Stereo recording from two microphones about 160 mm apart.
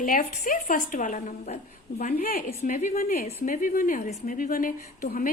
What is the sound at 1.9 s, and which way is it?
Speech, 70° left (ahead or behind).